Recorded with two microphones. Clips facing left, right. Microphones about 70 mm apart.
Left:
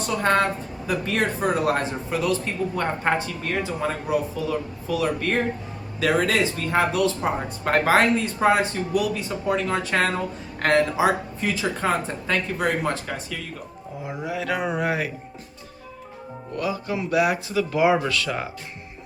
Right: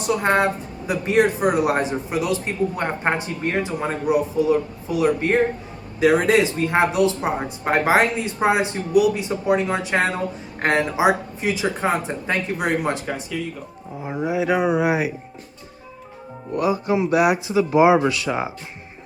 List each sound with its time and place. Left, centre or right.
0.0 s a man's voice: centre
16.6 s a man's voice: right